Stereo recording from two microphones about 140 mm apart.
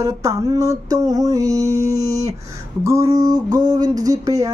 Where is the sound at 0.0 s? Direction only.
25° right (ahead or behind).